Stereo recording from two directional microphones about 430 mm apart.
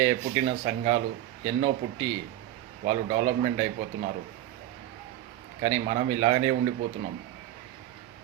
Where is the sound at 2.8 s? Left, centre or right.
Centre.